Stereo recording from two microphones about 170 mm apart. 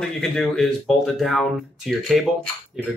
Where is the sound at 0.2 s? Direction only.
5° left (ahead or behind).